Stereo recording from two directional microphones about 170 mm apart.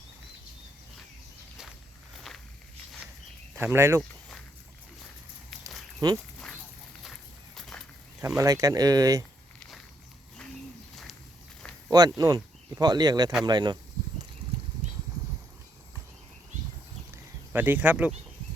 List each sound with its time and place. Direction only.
3.6 s speech: 15° right (ahead or behind)
5.6 s a sound: 25° right (ahead or behind)
7.0 s walk: centre (ahead or behind)
8.4 s speech: 20° right (ahead or behind)
9.6 s walk: centre (ahead or behind)
11.9 s speech: 25° right (ahead or behind)
17.5 s speech: 10° right (ahead or behind)